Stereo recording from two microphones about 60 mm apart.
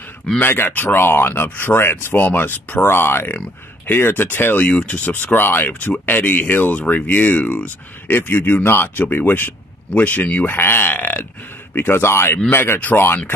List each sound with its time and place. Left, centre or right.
0.4 s speech: left
2.8 s speech: left
4.6 s speech: left
8.1 s speech: left
10.5 s speech: left